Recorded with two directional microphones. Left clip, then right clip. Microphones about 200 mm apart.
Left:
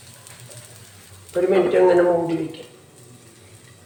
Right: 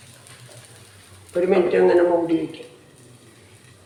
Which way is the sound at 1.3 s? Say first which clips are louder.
Left 1 dB; 35° right (ahead or behind).